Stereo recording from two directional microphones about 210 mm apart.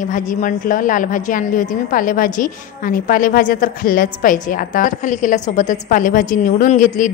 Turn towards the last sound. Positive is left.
turn(degrees=40)  # may be behind; listen again after turning